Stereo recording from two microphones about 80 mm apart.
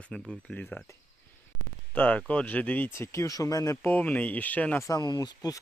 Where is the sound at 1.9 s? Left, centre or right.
Centre.